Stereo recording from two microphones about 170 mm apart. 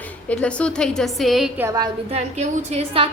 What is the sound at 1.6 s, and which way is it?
Speech, 20° right (ahead or behind).